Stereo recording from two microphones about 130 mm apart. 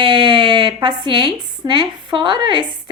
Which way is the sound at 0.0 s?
40° right (ahead or behind).